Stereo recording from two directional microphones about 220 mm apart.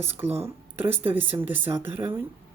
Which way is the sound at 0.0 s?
10° right (ahead or behind).